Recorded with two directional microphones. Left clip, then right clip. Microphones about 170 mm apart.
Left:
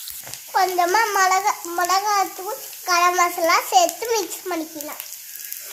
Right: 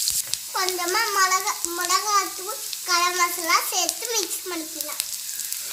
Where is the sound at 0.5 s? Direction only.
55° left (ahead or behind).